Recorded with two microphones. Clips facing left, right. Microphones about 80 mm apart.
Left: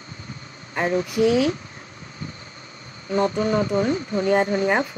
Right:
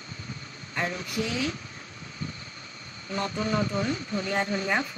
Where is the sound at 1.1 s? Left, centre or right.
Left.